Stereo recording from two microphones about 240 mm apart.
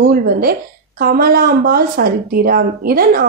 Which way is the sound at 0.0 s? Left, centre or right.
Right.